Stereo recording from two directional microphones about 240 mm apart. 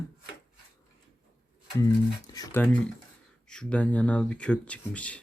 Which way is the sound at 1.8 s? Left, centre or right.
Centre.